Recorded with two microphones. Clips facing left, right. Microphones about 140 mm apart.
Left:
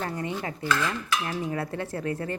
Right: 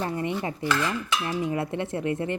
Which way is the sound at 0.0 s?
20° right (ahead or behind).